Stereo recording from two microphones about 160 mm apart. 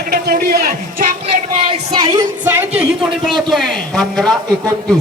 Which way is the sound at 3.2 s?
Centre (ahead or behind).